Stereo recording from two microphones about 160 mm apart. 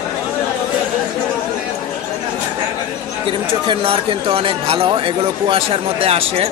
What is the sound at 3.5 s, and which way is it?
Speech, 35° right (ahead or behind).